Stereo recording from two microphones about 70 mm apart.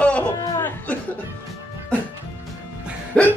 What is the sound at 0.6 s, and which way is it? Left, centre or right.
Chuckle, left.